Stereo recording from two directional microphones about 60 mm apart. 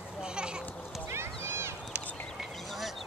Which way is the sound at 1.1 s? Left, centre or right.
Right.